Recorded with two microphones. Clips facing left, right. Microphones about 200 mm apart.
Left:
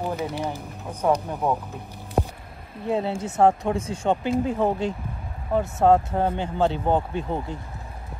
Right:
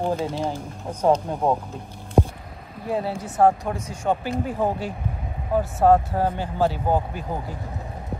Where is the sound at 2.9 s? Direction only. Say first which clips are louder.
Left 1 dB; 25° left (ahead or behind).